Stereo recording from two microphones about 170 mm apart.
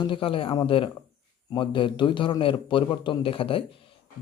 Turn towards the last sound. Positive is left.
turn(degrees=30)  # may be behind; listen again after turning